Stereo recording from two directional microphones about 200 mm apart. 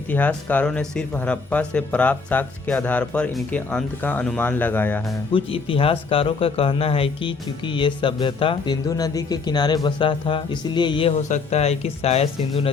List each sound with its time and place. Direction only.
0.1 s speech: 10° left (ahead or behind)
5.3 s a man's voice: 25° left (ahead or behind)